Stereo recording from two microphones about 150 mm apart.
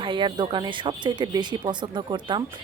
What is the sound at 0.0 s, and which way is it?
Speech, 30° right (ahead or behind).